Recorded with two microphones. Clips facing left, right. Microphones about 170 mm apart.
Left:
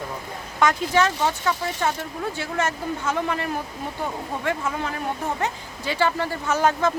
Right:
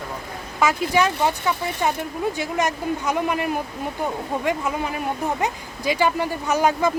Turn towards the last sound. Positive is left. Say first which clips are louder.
# right 1 dB
turn(degrees=-15)  # may be behind; listen again after turning